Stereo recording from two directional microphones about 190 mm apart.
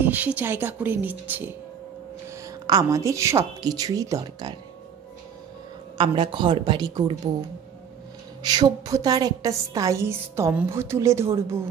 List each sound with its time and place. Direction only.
0.0 s a woman's voice: 10° right (ahead or behind)
5.9 s speech: 25° right (ahead or behind)
8.4 s a woman's voice: 20° right (ahead or behind)